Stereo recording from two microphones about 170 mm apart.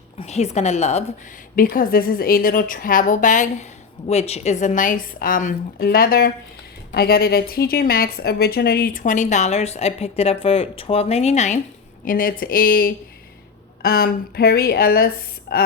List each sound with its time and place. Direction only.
0.2 s speech: 40° left (ahead or behind)
1.5 s a woman's voice: 55° left (ahead or behind)
12.0 s speech: 55° left (ahead or behind)